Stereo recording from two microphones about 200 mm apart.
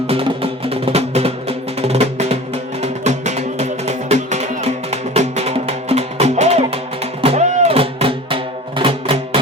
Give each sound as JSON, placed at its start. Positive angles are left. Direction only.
{"t": 0.1, "sound": "music", "side_deg": -30}